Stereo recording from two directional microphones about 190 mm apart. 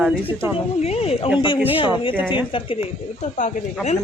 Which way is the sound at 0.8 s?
35° left (ahead or behind).